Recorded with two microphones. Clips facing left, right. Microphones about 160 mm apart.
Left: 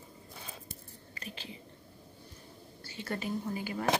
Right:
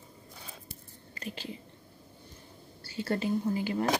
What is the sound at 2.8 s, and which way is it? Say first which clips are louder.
Whispering: right 6 dB; 30° right (ahead or behind).